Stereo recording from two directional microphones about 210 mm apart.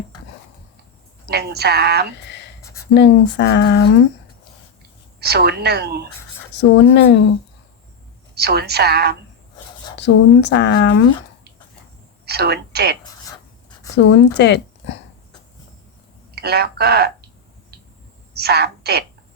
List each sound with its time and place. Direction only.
1.3 s a woman's voice: 50° right (ahead or behind)
2.1 s a sound: 55° left (ahead or behind)
2.9 s speech: 55° left (ahead or behind)
5.2 s a woman's voice: 50° right (ahead or behind)
6.5 s speech: 55° left (ahead or behind)
8.4 s a woman's voice: 50° right (ahead or behind)
9.9 s speech: 55° left (ahead or behind)
12.2 s a woman's voice: 50° right (ahead or behind)
13.9 s speech: 55° left (ahead or behind)
16.3 s speech: 50° right (ahead or behind)
18.3 s a woman's voice: 50° right (ahead or behind)